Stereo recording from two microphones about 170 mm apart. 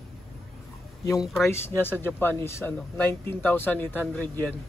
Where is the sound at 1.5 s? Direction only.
15° left (ahead or behind).